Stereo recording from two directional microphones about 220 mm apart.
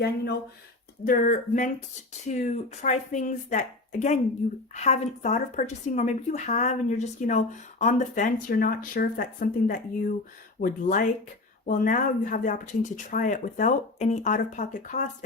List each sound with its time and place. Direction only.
1.0 s speech: 35° left (ahead or behind)